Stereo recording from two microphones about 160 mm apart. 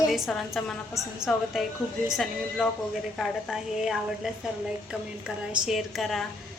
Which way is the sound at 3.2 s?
Centre (ahead or behind).